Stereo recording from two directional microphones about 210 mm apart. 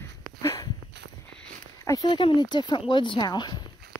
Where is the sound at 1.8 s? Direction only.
15° left (ahead or behind).